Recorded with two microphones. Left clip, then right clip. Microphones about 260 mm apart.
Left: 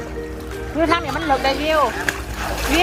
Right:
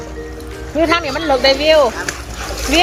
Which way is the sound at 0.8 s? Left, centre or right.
Right.